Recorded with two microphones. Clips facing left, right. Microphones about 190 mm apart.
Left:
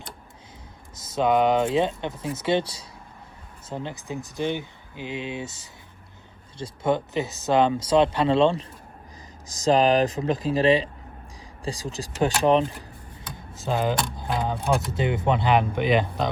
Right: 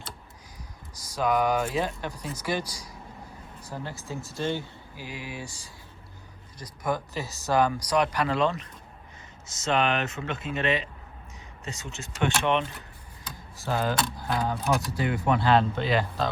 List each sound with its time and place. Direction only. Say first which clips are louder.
0.9 s speech: left 4 dB; 25° left (ahead or behind)
13.6 s speech: left 3 dB; 20° left (ahead or behind)